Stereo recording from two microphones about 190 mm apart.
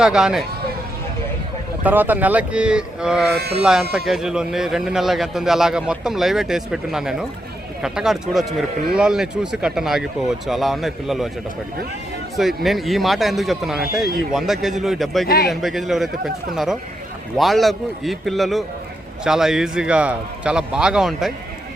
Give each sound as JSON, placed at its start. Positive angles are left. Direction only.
{"t": 0.0, "sound": "speech", "side_deg": -5}
{"t": 1.8, "sound": "speech", "side_deg": -10}
{"t": 3.3, "sound": "speech", "side_deg": -60}
{"t": 3.6, "sound": "speech", "side_deg": -5}
{"t": 12.6, "sound": "speech", "side_deg": 0}